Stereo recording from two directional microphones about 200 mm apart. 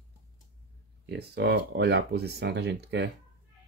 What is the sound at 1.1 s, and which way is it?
Speech, 55° right (ahead or behind).